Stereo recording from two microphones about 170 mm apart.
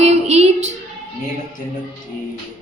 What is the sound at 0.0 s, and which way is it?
Female singing, 40° right (ahead or behind).